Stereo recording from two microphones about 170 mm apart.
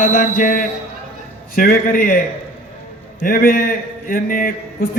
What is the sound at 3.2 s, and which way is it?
A man's voice, 55° left (ahead or behind).